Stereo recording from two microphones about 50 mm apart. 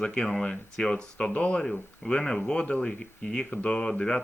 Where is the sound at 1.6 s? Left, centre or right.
Centre.